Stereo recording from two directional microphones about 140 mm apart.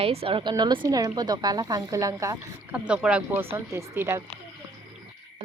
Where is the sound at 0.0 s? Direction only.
45° right (ahead or behind); by 2.4 s 20° right (ahead or behind).